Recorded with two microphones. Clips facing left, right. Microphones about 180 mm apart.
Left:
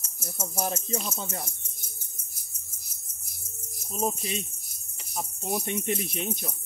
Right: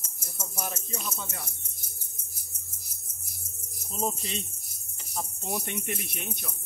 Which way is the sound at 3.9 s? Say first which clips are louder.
Left 2 dB; 10° left (ahead or behind).